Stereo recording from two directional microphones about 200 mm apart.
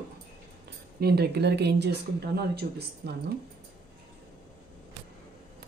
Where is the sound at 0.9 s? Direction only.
55° right (ahead or behind).